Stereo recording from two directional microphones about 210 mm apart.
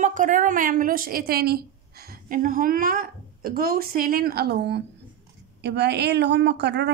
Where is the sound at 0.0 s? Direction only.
35° right (ahead or behind).